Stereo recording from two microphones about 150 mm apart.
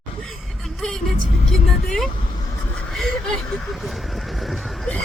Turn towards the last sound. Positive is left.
turn(degrees=0)  # may be behind; listen again after turning